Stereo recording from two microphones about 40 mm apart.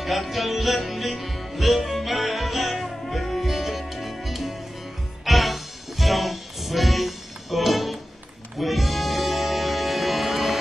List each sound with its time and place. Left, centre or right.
0.0 s music: centre